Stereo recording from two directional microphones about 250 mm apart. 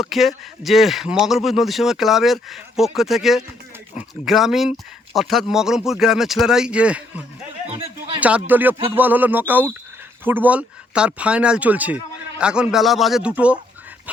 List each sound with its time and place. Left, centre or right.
0.0 s speech: centre
7.7 s a sound: right
8.2 s speech: centre